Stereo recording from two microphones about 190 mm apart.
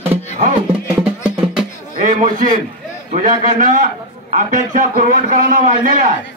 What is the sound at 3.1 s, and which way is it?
A man's voice, 40° right (ahead or behind).